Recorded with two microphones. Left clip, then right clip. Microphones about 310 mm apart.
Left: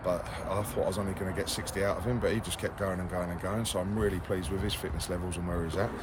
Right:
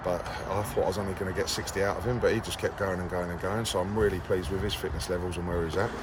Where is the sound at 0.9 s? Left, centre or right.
Centre.